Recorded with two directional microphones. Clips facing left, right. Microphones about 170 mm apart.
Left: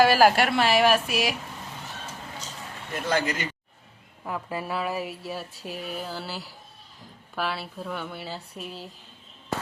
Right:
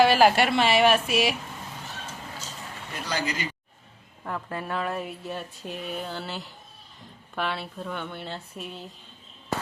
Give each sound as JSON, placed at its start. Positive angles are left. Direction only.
{"t": 0.0, "sound": "speech", "side_deg": 5}
{"t": 2.9, "sound": "speech", "side_deg": 55}
{"t": 4.2, "sound": "speech", "side_deg": 10}